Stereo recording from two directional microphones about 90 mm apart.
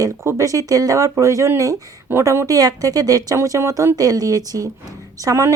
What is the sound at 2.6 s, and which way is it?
A woman's voice, 45° right (ahead or behind).